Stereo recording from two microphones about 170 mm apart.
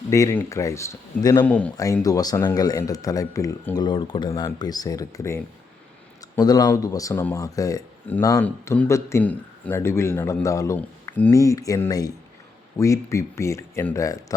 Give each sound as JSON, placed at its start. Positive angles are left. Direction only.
{"t": 0.1, "sound": "speech", "side_deg": 15}
{"t": 1.5, "sound": "a man's voice", "side_deg": 5}
{"t": 1.7, "sound": "a man's voice", "side_deg": 20}